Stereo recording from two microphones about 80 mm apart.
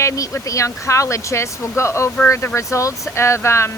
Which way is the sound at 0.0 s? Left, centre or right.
Left.